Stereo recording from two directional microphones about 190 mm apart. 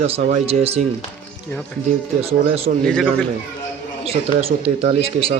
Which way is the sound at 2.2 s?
30° right (ahead or behind).